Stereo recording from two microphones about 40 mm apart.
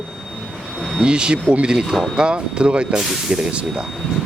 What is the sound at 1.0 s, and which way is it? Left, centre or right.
Speech, right.